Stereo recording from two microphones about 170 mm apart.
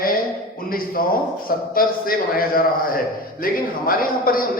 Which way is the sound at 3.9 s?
55° left (ahead or behind).